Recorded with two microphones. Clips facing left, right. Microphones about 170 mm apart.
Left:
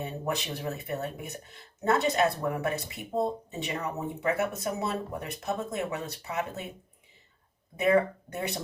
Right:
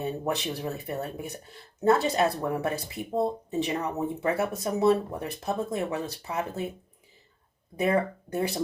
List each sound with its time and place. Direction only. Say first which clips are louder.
0.0 s speech: right 3 dB; 30° right (ahead or behind)
7.8 s speech: left 1 dB; 30° right (ahead or behind)